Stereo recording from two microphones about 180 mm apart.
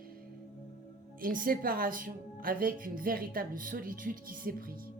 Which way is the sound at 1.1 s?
50° right (ahead or behind).